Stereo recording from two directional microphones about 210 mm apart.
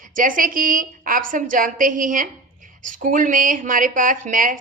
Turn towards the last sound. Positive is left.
turn(degrees=-40)  # may be behind; listen again after turning